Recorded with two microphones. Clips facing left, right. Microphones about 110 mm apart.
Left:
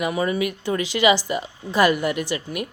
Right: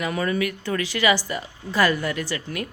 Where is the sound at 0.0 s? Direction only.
15° left (ahead or behind).